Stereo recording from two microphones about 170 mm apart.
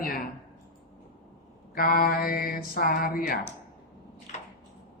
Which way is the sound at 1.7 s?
55° left (ahead or behind).